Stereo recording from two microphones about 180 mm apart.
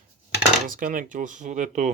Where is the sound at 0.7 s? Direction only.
50° right (ahead or behind).